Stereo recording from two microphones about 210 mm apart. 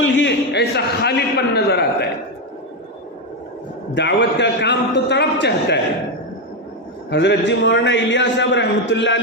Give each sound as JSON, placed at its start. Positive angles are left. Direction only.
{"t": 0.0, "sound": "a sound", "side_deg": 60}
{"t": 3.9, "sound": "a man's voice", "side_deg": 55}
{"t": 7.1, "sound": "a man's voice", "side_deg": 55}